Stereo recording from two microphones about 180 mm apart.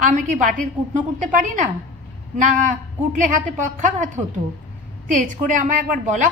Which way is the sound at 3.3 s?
45° right (ahead or behind).